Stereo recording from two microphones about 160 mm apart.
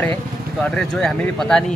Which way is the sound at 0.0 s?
5° left (ahead or behind).